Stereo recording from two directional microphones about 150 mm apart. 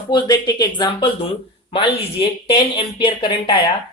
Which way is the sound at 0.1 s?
30° left (ahead or behind).